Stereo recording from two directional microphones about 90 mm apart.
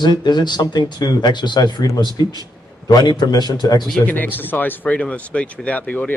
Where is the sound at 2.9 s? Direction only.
50° left (ahead or behind).